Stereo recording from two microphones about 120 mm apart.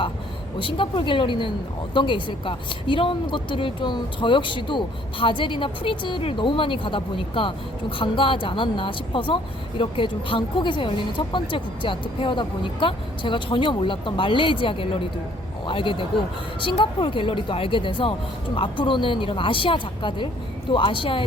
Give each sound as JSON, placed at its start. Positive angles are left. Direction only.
{"t": 0.6, "sound": "a woman's voice", "side_deg": 45}